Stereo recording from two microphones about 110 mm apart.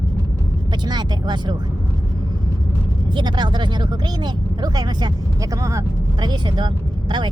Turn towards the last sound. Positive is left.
turn(degrees=-45)  # may be behind; listen again after turning